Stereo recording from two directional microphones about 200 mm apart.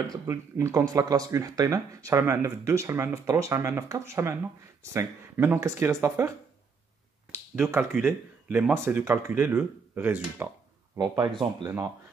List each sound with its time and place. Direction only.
0.0 s speech: 15° right (ahead or behind)
7.5 s speech: centre (ahead or behind)
11.0 s speech: 20° right (ahead or behind)